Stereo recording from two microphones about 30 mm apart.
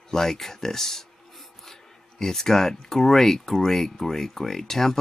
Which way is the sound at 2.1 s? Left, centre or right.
Centre.